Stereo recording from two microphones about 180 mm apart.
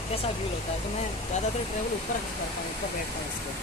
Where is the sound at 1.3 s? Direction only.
40° left (ahead or behind).